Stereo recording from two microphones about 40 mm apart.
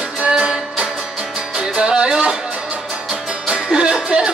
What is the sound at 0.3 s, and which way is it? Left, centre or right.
Music, centre.